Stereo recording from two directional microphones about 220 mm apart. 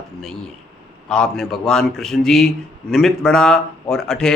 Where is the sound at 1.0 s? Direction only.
5° left (ahead or behind).